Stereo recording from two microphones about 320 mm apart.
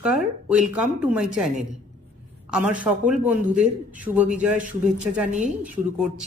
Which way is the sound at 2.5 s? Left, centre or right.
Centre.